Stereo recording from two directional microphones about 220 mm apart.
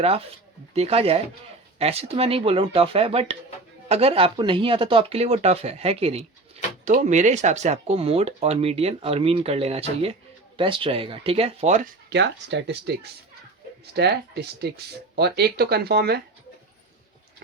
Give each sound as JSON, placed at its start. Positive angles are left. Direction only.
{"t": 0.7, "sound": "speech", "side_deg": -25}
{"t": 12.1, "sound": "speech", "side_deg": -50}
{"t": 13.9, "sound": "speech", "side_deg": -50}